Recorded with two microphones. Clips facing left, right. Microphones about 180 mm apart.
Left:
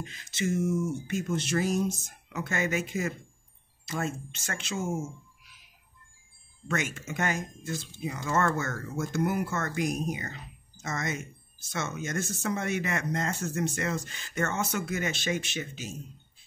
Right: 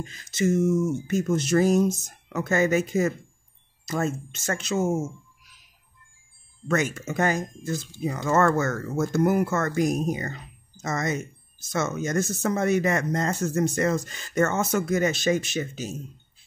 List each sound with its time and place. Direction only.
0.0 s speech: 40° right (ahead or behind)
6.7 s speech: 40° right (ahead or behind)